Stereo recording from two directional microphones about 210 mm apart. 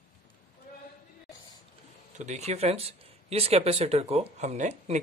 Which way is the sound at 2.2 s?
35° right (ahead or behind).